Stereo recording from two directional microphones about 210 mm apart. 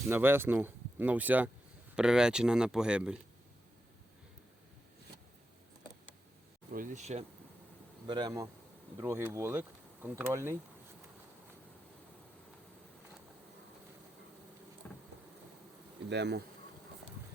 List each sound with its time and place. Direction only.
0.1 s speech: 10° right (ahead or behind)
6.7 s speech: 40° right (ahead or behind)
8.0 s speech: 20° right (ahead or behind)
14.8 s rain: 5° left (ahead or behind)
16.0 s bee: 55° right (ahead or behind)